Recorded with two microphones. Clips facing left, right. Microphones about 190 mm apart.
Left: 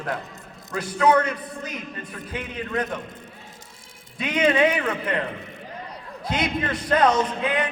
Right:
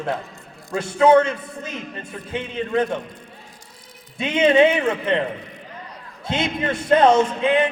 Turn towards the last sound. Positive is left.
turn(degrees=-25)  # may be behind; listen again after turning